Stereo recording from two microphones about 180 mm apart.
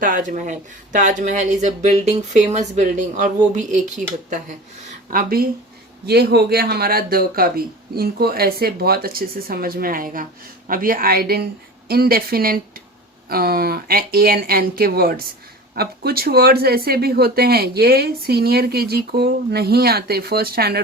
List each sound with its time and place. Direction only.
0.0 s speech: 45° right (ahead or behind)
5.1 s speech: 55° right (ahead or behind)